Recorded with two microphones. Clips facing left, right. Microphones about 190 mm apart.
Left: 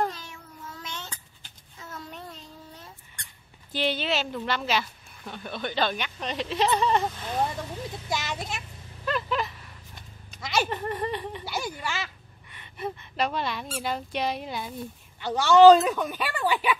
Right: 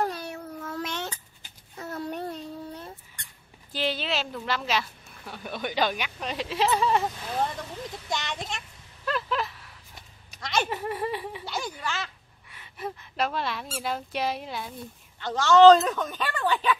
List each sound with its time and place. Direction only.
0.1 s child singing: 65° right (ahead or behind)
3.7 s a woman's voice: centre (ahead or behind)
8.1 s a sound: 5° left (ahead or behind)
10.7 s speech: 5° right (ahead or behind)
11.4 s a woman's voice: 5° left (ahead or behind)
15.1 s speech: 15° left (ahead or behind)